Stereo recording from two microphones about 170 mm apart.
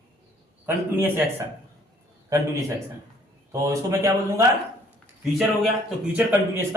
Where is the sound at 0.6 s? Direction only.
15° right (ahead or behind).